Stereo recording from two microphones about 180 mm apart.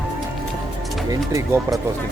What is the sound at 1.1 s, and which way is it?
Speech, 15° right (ahead or behind).